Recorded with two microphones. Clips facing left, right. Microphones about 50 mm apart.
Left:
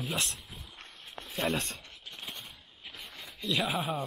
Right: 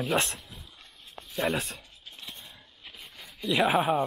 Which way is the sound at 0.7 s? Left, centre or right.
Left.